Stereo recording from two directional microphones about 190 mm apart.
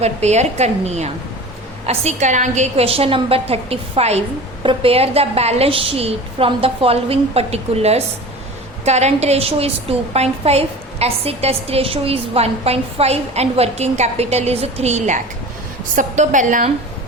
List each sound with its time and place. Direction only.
0.0 s a woman's voice: 35° right (ahead or behind)